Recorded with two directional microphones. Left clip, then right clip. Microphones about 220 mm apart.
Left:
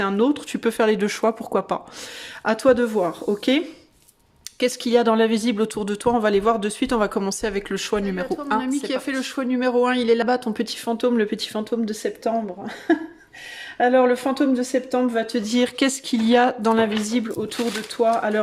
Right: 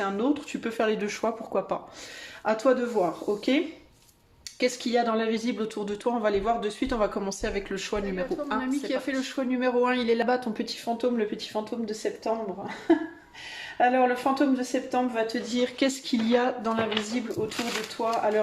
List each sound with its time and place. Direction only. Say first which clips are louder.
0.0 s a woman's voice: left 6 dB; 45° left (ahead or behind)
4.6 s a woman's voice: left 6 dB; 45° left (ahead or behind)
13.7 s speech: left 5 dB; 45° left (ahead or behind)